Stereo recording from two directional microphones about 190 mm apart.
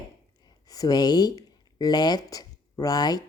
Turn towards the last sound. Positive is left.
turn(degrees=20)  # may be behind; listen again after turning